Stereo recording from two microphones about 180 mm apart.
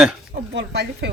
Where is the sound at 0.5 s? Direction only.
70° right (ahead or behind).